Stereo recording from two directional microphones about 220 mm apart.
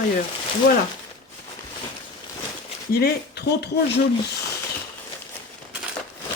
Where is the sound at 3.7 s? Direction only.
55° left (ahead or behind).